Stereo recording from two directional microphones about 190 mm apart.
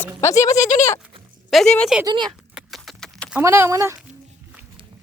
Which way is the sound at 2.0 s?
25° right (ahead or behind).